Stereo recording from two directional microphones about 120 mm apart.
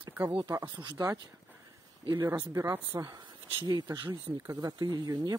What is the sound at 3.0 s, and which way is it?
Speech, 40° right (ahead or behind).